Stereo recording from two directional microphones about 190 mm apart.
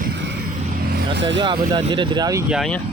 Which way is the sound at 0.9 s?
55° right (ahead or behind).